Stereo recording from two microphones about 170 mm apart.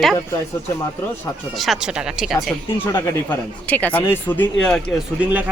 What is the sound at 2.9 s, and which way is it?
Speech, 10° left (ahead or behind).